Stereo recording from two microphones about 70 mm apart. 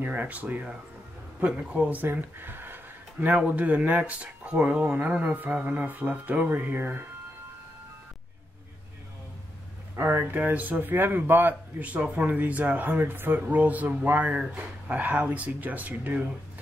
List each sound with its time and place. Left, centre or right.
0.0 s speech: right
9.9 s speech: right
15.0 s speech: right